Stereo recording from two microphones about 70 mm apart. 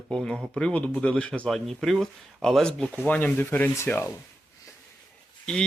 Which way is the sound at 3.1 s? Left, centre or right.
Left.